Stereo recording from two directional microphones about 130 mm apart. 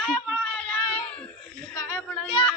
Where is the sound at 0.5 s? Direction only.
15° left (ahead or behind).